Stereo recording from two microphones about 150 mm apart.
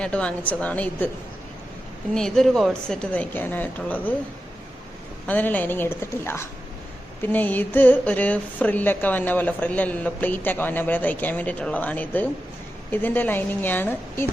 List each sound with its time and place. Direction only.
0.0 s a woman's voice: 5° left (ahead or behind)
2.1 s a woman's voice: 5° left (ahead or behind)
5.2 s a woman's voice: 10° left (ahead or behind)